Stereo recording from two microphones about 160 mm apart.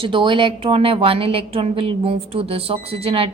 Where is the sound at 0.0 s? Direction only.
30° right (ahead or behind).